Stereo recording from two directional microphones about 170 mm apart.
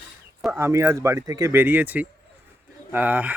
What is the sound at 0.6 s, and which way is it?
Speech, 15° right (ahead or behind).